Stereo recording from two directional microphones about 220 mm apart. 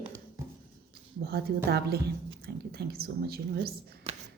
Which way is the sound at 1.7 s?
45° right (ahead or behind).